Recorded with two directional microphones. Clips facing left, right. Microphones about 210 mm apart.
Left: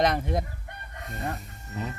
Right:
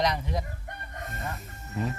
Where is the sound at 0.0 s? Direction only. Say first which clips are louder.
Left 4 dB; 50° left (ahead or behind).